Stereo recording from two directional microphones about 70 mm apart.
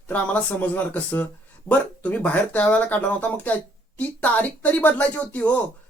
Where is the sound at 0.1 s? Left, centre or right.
Left.